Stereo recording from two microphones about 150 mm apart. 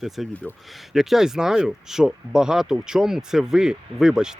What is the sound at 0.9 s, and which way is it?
Speech, centre (ahead or behind).